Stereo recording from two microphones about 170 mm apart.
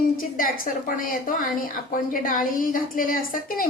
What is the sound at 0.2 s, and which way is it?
A woman's voice, 55° left (ahead or behind).